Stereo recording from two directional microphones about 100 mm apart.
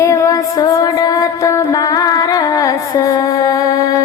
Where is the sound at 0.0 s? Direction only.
30° left (ahead or behind).